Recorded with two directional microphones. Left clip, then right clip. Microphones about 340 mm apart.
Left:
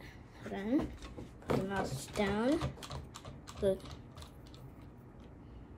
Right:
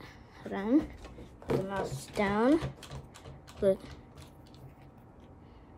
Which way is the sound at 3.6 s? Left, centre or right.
Centre.